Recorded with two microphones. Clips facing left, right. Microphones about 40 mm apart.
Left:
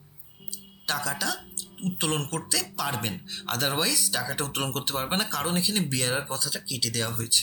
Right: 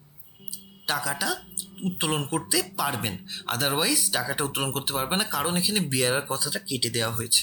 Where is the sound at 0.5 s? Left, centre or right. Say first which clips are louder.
Right 2 dB; centre.